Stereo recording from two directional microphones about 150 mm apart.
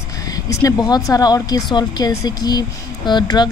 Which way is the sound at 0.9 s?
25° left (ahead or behind).